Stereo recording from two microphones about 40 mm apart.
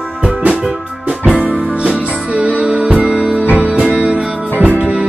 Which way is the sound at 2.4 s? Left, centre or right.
Right.